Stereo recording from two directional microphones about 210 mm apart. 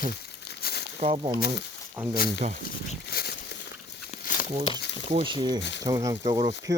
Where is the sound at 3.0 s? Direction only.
50° left (ahead or behind).